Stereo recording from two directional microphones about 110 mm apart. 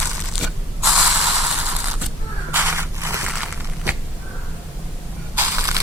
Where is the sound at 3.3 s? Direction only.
10° right (ahead or behind).